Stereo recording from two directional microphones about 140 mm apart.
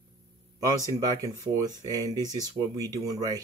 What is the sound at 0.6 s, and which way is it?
Speech, 25° right (ahead or behind).